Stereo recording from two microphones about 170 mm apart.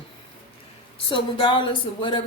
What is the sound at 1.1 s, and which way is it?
Speech, 30° left (ahead or behind).